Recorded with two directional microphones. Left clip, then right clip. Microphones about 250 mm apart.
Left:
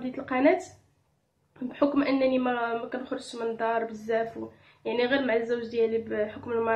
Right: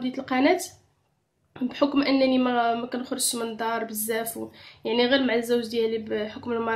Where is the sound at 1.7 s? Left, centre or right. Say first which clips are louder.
Right 2 dB; right.